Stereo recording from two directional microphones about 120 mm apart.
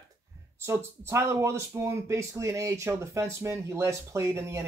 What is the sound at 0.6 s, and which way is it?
Speech, 20° right (ahead or behind).